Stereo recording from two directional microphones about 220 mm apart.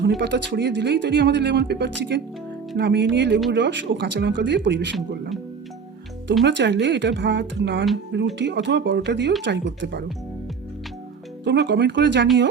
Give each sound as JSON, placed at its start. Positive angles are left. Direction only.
{"t": 0.2, "sound": "speech", "side_deg": -50}
{"t": 6.4, "sound": "speech", "side_deg": -55}
{"t": 11.4, "sound": "speech", "side_deg": -50}